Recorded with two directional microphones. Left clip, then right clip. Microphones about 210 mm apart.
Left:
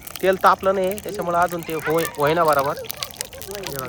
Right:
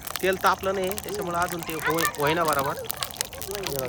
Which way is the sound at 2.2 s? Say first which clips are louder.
Left 8 dB; 5° right (ahead or behind).